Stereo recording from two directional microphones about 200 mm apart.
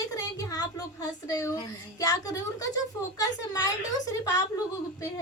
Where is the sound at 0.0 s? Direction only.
20° left (ahead or behind).